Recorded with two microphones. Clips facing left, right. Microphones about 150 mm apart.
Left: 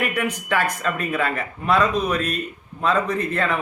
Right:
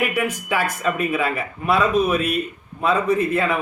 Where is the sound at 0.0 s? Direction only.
5° right (ahead or behind).